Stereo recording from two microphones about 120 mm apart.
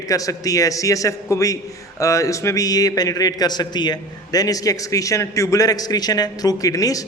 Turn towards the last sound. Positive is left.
turn(degrees=30)  # may be behind; listen again after turning